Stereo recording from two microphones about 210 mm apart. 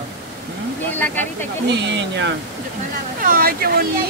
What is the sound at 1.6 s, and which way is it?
Speech, 55° right (ahead or behind).